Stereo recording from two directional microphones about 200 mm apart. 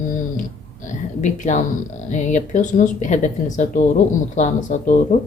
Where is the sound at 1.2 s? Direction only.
35° left (ahead or behind).